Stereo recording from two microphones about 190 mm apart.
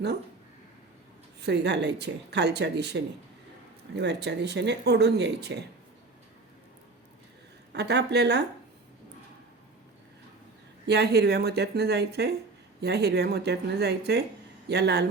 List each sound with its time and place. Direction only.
1.4 s speech: 65° right (ahead or behind)
7.7 s speech: 60° right (ahead or behind)
10.8 s speech: 60° right (ahead or behind)